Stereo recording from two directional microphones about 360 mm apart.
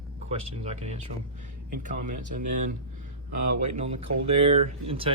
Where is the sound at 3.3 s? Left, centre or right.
Right.